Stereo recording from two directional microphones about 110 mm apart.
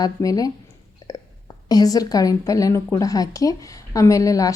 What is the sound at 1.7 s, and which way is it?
A woman's voice, 35° left (ahead or behind).